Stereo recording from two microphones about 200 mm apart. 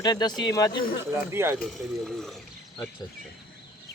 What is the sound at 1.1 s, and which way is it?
Speech, 10° right (ahead or behind).